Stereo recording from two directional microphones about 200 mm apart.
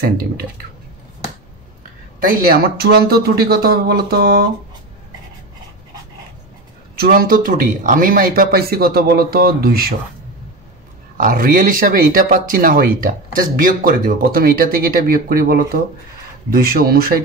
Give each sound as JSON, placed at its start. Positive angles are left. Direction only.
{"t": 2.2, "sound": "speech", "side_deg": -45}
{"t": 7.0, "sound": "speech", "side_deg": -45}
{"t": 11.1, "sound": "speech", "side_deg": -45}